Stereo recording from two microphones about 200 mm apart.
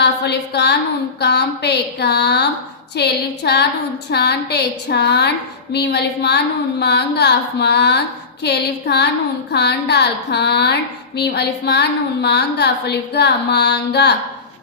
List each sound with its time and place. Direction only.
0.0 s a woman's voice: 60° left (ahead or behind)